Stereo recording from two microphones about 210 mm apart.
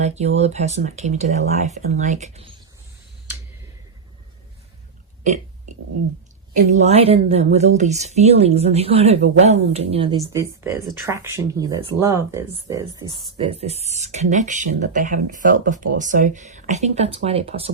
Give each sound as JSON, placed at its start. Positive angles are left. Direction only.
{"t": 0.0, "sound": "speech", "side_deg": -30}
{"t": 6.7, "sound": "speech", "side_deg": -30}
{"t": 10.3, "sound": "speech", "side_deg": -15}